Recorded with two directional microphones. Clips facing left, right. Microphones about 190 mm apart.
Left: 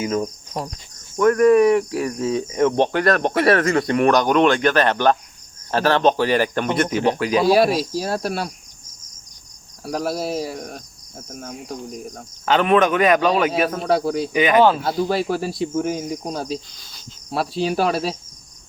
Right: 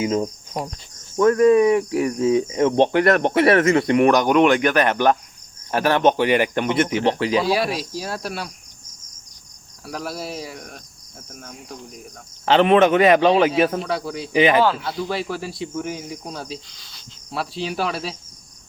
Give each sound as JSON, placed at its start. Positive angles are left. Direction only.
{"t": 0.0, "sound": "speech", "side_deg": -25}
{"t": 7.4, "sound": "speech", "side_deg": 40}
{"t": 9.8, "sound": "speech", "side_deg": 40}
{"t": 12.5, "sound": "speech", "side_deg": -30}
{"t": 13.8, "sound": "speech", "side_deg": 40}
{"t": 14.3, "sound": "speech", "side_deg": -30}
{"t": 14.8, "sound": "speech", "side_deg": 40}